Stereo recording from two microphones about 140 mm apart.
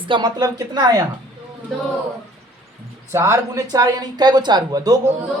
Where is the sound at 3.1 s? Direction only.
20° right (ahead or behind).